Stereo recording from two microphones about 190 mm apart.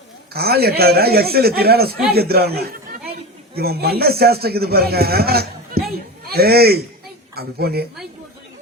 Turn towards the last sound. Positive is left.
turn(degrees=-55)  # may be behind; listen again after turning